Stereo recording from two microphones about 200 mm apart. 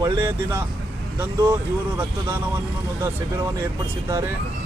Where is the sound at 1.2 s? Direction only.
15° right (ahead or behind).